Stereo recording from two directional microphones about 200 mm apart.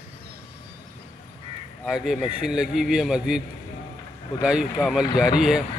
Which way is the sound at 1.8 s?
Centre (ahead or behind).